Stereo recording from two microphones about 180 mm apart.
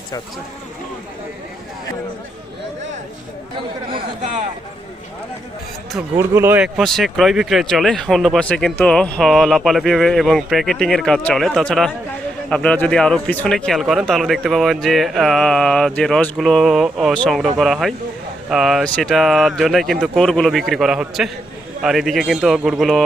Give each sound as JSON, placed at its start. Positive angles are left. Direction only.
{"t": 3.9, "sound": "speech", "side_deg": -40}
{"t": 6.1, "sound": "speech", "side_deg": -15}